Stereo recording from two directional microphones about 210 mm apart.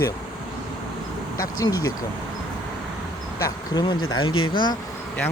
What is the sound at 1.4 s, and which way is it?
Speech, 15° left (ahead or behind).